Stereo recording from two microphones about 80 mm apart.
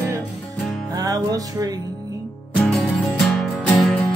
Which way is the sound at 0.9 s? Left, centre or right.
Right.